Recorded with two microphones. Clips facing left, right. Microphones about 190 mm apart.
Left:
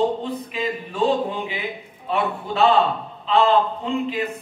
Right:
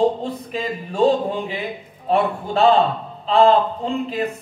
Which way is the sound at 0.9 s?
40° right (ahead or behind).